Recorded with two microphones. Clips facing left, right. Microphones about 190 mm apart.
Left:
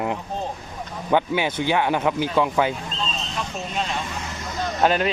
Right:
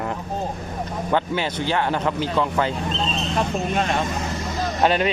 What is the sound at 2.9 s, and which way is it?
Speech, 60° right (ahead or behind).